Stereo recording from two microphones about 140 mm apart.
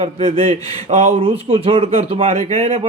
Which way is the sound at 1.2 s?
40° right (ahead or behind).